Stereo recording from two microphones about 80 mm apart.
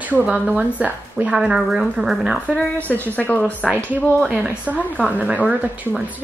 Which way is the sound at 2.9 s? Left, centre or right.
Left.